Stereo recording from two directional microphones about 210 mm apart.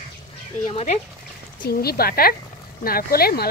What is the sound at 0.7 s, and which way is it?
Speech, 30° left (ahead or behind).